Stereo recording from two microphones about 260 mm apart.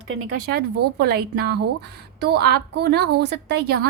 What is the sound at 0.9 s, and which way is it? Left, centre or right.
A woman's voice, right.